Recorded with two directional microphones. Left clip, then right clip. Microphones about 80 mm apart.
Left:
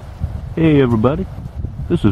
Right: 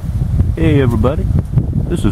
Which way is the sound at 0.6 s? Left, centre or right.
Centre.